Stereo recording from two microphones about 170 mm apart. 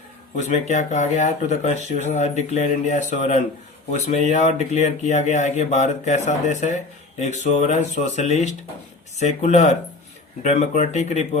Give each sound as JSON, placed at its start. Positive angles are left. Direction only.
{"t": 0.3, "sound": "speech", "side_deg": 45}